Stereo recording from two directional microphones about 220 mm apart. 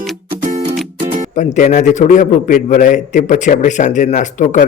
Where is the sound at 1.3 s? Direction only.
35° left (ahead or behind).